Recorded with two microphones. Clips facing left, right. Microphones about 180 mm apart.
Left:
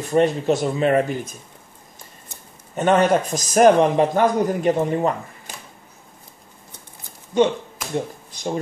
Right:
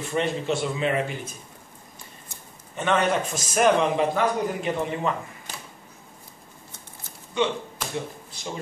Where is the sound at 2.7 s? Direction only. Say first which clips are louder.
Left 6 dB; 40° left (ahead or behind).